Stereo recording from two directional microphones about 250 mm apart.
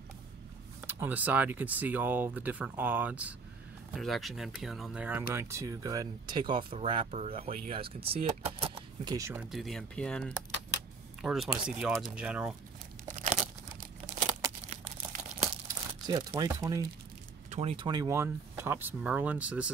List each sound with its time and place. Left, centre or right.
0.7 s speech: centre
13.2 s crumpling: right
15.7 s speech: centre
17.5 s speech: right; by 19.7 s centre